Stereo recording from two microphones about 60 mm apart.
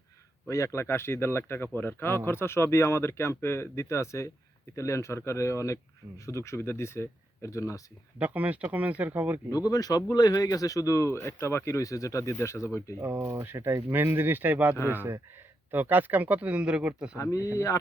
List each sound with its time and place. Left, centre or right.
0.4 s speech: left
6.6 s speech: left
8.2 s speech: right
9.5 s speech: left
13.0 s speech: right; by 17.1 s centre